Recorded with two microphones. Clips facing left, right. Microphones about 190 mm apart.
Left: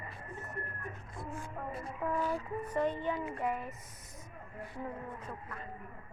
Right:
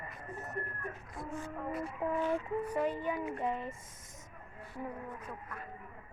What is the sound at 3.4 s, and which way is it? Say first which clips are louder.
Chicken: left 2 dB; 25° right (ahead or behind).